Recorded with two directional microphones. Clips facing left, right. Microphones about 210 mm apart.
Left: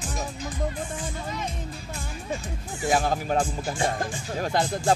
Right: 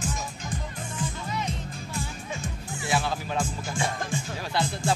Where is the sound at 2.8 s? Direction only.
45° left (ahead or behind).